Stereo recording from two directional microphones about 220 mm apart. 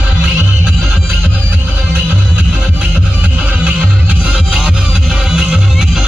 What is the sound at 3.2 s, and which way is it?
Music, 5° right (ahead or behind).